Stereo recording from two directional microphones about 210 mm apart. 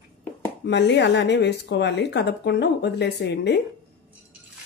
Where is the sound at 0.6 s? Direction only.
55° left (ahead or behind).